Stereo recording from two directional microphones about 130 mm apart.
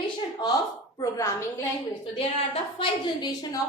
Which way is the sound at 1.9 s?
45° left (ahead or behind).